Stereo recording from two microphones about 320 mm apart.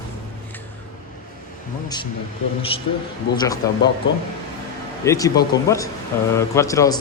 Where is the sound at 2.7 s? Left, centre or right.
Centre.